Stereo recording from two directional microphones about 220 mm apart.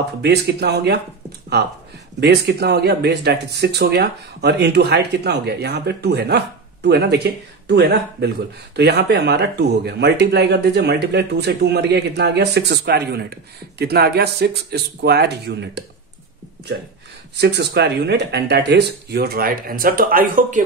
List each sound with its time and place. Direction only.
0.2 s speech: 50° right (ahead or behind)
2.1 s speech: 50° right (ahead or behind)
17.4 s speech: 50° right (ahead or behind)